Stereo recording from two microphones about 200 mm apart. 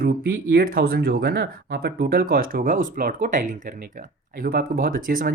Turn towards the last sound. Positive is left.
turn(degrees=-45)  # may be behind; listen again after turning